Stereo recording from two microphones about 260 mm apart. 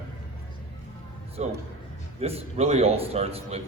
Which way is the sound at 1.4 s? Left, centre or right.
Right.